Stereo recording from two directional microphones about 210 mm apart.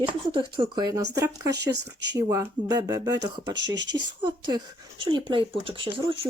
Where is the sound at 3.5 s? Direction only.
60° right (ahead or behind).